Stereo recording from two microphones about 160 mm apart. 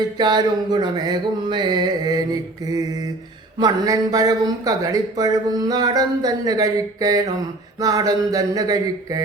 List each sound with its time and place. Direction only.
0.2 s speech: 25° right (ahead or behind)
3.6 s speech: 25° right (ahead or behind)